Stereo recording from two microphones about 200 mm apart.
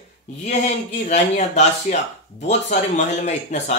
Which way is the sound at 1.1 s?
35° left (ahead or behind).